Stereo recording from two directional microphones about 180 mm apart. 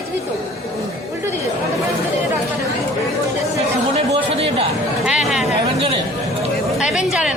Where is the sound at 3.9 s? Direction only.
35° right (ahead or behind).